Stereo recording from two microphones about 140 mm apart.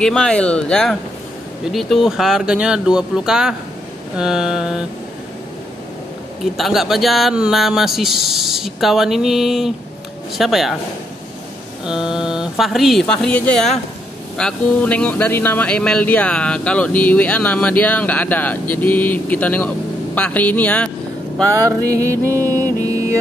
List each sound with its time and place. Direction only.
0.0 s speech: 5° left (ahead or behind)
6.4 s speech: centre (ahead or behind)
11.8 s speech: 5° right (ahead or behind)
21.6 s music: 20° right (ahead or behind)